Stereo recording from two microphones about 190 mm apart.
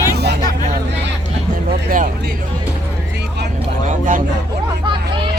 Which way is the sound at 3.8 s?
45° right (ahead or behind).